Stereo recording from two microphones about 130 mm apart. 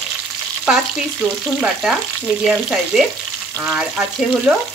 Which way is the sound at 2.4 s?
5° right (ahead or behind).